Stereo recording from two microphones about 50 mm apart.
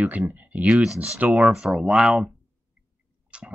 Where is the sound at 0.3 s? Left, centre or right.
Right.